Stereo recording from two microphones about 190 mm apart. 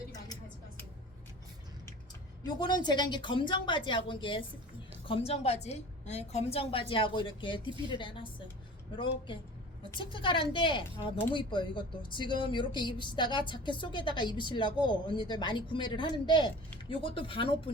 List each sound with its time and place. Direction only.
2.6 s a woman's voice: 25° left (ahead or behind)